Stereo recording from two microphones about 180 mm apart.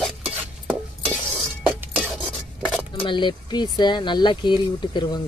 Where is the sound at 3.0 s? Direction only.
25° left (ahead or behind).